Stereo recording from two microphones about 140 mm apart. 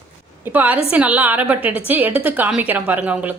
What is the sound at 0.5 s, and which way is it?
A woman's voice, 10° right (ahead or behind).